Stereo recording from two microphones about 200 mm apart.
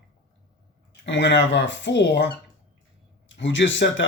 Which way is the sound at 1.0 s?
65° left (ahead or behind).